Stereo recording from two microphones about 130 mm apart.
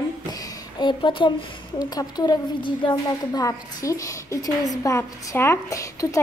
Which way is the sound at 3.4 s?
25° left (ahead or behind).